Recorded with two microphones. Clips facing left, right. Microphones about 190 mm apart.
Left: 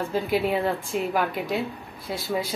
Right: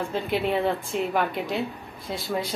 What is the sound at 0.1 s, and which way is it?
Speech, 5° left (ahead or behind).